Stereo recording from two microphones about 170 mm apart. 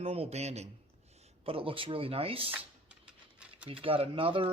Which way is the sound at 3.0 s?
5° right (ahead or behind).